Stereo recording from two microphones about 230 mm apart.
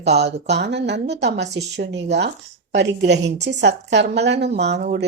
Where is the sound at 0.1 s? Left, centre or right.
Right.